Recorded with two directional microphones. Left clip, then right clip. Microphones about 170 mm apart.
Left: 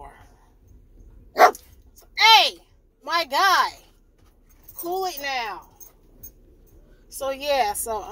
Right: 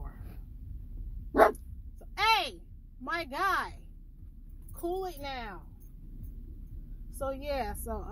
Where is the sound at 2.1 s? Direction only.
20° left (ahead or behind).